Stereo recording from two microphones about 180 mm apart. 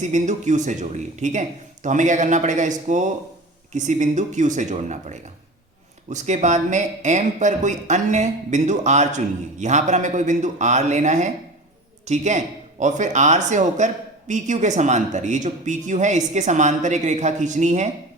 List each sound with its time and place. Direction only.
0.0 s speech: 40° right (ahead or behind)